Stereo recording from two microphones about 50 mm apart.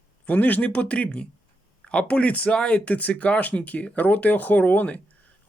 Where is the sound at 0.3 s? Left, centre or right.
Left.